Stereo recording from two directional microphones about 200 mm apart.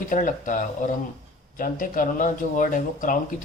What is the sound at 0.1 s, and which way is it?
Speech, 40° left (ahead or behind).